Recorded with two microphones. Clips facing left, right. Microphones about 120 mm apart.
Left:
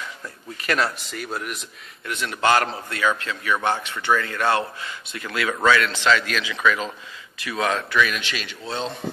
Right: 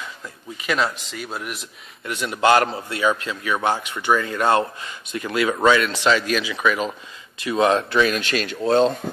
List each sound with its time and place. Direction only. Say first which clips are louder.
0.7 s speech: right 1 dB; 5° right (ahead or behind)
2.0 s speech: right 3 dB; 15° right (ahead or behind)
8.2 s speech: right 8 dB; 45° right (ahead or behind)